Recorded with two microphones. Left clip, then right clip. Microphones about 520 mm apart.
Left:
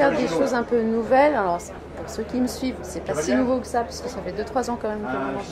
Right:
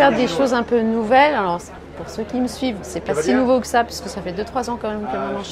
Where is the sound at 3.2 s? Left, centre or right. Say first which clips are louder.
Right 6 dB; right.